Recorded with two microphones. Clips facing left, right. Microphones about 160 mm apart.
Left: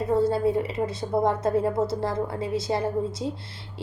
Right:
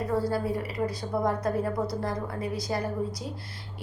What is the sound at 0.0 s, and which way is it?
A woman's voice, 25° left (ahead or behind).